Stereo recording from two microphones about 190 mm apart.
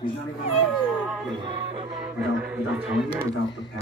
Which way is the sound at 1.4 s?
25° right (ahead or behind).